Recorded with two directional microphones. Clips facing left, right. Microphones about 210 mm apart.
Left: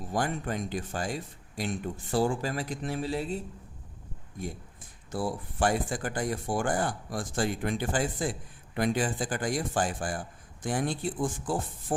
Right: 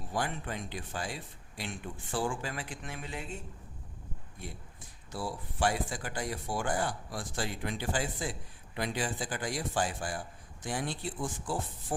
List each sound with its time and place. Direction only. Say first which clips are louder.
0.1 s speech: left 5 dB; 45° left (ahead or behind)
5.1 s speech: left 6 dB; 50° left (ahead or behind)